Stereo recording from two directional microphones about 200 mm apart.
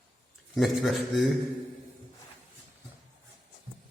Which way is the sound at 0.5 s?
Centre (ahead or behind).